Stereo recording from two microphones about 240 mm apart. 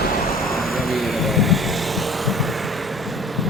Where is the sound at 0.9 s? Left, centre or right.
Centre.